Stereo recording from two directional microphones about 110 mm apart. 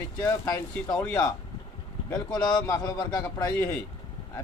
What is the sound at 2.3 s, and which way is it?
Speech, 40° left (ahead or behind).